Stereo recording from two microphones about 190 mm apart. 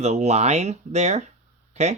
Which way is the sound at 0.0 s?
35° right (ahead or behind).